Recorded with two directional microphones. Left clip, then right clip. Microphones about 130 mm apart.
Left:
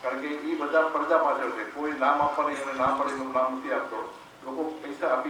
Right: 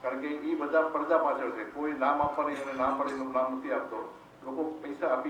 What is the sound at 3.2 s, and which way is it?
Speech, 25° right (ahead or behind).